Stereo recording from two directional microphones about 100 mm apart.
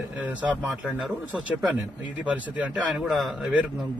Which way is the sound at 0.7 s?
Centre (ahead or behind).